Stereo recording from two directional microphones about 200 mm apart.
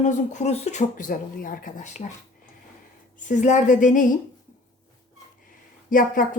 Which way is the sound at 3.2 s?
40° left (ahead or behind).